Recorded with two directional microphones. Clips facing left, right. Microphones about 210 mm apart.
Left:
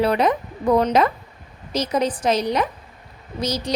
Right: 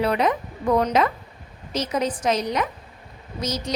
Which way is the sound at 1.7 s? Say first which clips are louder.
Left 3 dB; 35° left (ahead or behind).